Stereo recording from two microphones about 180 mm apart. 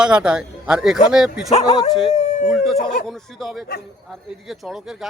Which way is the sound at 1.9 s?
Centre (ahead or behind).